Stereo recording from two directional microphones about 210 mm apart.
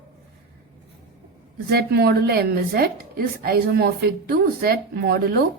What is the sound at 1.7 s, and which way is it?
Speech, 50° right (ahead or behind).